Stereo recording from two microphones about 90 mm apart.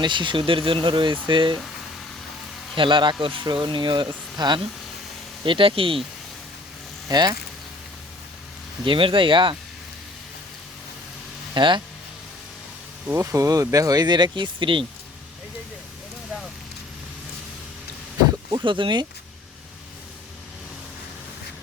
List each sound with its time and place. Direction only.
0.0 s speech: 60° right (ahead or behind)
2.7 s speech: 65° right (ahead or behind)
3.4 s speech: 60° right (ahead or behind)
5.5 s speech: 80° right
7.1 s speech: 50° right (ahead or behind)
8.8 s speech: 75° right (ahead or behind)
11.5 s speech: 60° right (ahead or behind)
13.1 s speech: 40° right (ahead or behind); by 14.8 s 65° right (ahead or behind)
18.5 s speech: 65° right (ahead or behind)